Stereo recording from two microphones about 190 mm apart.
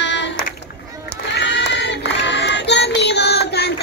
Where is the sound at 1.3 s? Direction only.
65° left (ahead or behind).